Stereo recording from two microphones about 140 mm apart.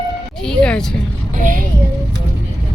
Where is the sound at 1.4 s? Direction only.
70° right (ahead or behind).